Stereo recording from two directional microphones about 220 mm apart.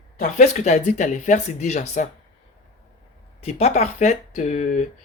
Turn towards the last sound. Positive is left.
turn(degrees=35)  # may be behind; listen again after turning